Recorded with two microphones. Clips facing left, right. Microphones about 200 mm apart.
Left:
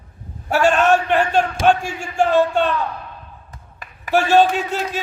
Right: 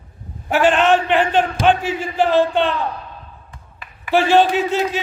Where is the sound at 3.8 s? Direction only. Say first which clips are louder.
Left 1 dB; 45° left (ahead or behind).